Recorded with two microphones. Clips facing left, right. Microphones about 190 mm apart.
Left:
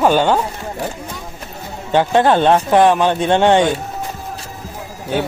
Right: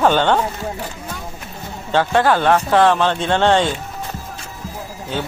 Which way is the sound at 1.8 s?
20° left (ahead or behind).